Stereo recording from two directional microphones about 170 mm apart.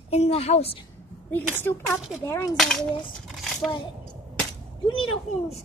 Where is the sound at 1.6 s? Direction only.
15° left (ahead or behind).